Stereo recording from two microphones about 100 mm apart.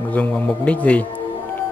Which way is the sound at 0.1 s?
15° left (ahead or behind).